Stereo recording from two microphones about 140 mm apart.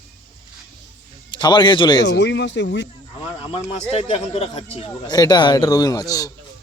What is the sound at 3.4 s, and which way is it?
Speech, 40° left (ahead or behind).